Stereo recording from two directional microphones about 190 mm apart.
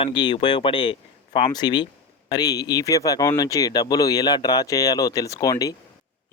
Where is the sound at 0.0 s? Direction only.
25° left (ahead or behind).